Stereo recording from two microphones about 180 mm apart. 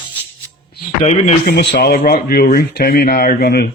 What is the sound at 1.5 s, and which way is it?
Speech, 60° left (ahead or behind).